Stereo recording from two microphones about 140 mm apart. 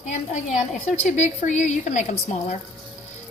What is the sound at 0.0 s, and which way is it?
A woman's voice, 60° left (ahead or behind).